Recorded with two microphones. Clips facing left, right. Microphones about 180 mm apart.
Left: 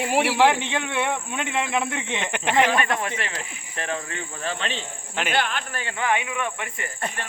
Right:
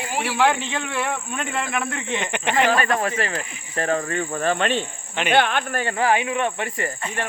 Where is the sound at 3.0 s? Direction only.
40° right (ahead or behind).